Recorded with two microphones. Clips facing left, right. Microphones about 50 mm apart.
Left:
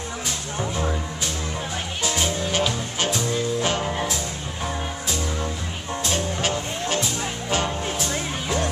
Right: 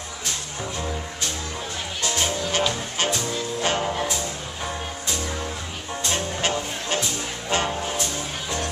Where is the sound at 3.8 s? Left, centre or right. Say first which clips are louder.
Even; centre.